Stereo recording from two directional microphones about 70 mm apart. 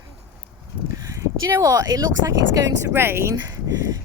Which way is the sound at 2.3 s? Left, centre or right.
Right.